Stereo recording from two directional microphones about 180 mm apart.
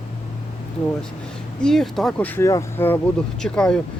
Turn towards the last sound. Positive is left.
turn(degrees=5)  # may be behind; listen again after turning